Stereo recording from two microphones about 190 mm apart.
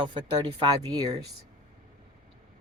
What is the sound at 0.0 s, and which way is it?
Speech, 25° right (ahead or behind).